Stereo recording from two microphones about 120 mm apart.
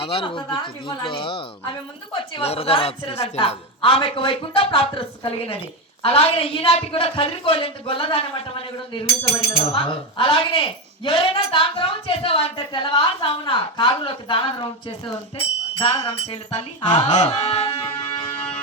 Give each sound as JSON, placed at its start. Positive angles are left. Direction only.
{"t": 0.0, "sound": "speech", "side_deg": 50}
{"t": 2.4, "sound": "a woman's voice", "side_deg": 60}
{"t": 3.8, "sound": "speech", "side_deg": 50}
{"t": 16.2, "sound": "a woman's voice", "side_deg": 60}
{"t": 17.7, "sound": "music", "side_deg": 30}